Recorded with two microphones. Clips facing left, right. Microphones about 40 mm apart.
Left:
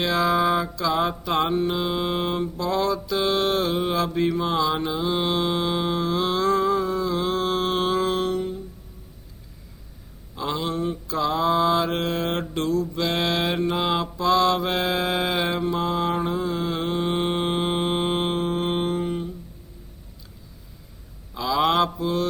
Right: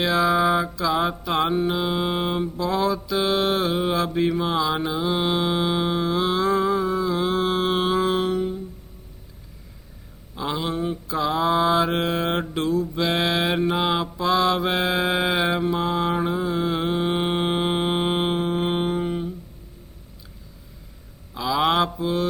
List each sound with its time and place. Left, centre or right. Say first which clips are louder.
0.0 s mantra: right 1 dB; centre
10.3 s mantra: even; centre
21.3 s mantra: even; centre